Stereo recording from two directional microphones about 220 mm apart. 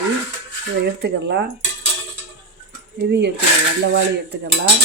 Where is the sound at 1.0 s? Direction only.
50° right (ahead or behind).